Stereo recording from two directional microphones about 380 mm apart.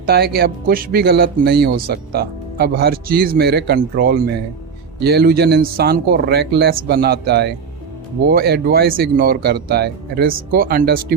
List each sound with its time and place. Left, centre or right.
0.0 s speech: right